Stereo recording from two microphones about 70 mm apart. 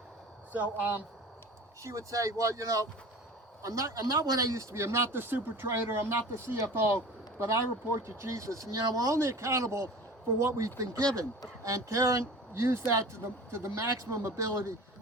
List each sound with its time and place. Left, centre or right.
0.5 s speech: right
1.8 s speech: right
4.0 s speech: right